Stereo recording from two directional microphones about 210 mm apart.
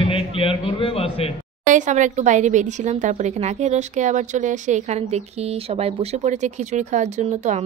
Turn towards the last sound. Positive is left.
turn(degrees=-35)  # may be behind; listen again after turning